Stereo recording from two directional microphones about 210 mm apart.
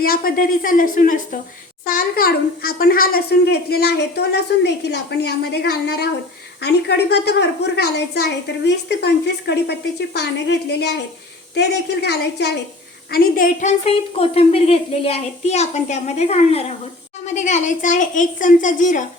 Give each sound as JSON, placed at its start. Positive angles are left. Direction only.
{"t": 0.0, "sound": "a woman's voice", "side_deg": 45}